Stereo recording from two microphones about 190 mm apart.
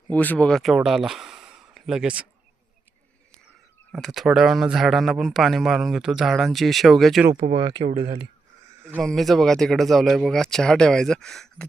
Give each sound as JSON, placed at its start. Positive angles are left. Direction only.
{"t": 0.1, "sound": "speech", "side_deg": 10}
{"t": 3.9, "sound": "speech", "side_deg": 0}
{"t": 7.3, "sound": "speech", "side_deg": -25}
{"t": 9.0, "sound": "speech", "side_deg": 0}